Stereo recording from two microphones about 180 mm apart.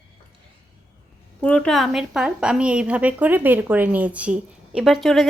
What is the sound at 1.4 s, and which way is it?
A woman's voice, 5° left (ahead or behind).